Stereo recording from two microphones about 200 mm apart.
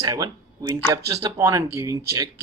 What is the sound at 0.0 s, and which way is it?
Speech, 20° right (ahead or behind).